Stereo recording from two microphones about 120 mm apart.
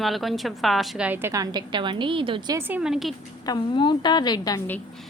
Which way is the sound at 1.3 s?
35° right (ahead or behind).